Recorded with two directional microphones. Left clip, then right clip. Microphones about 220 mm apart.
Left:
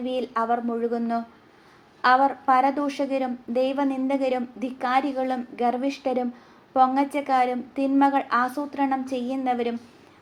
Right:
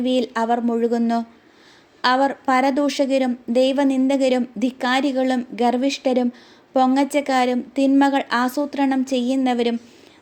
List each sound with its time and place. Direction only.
0.0 s speech: 50° right (ahead or behind)